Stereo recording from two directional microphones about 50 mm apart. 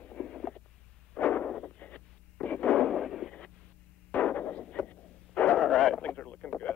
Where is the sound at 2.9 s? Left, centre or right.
Centre.